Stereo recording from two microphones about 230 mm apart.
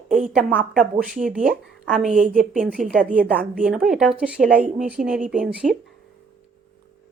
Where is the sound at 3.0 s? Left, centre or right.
Right.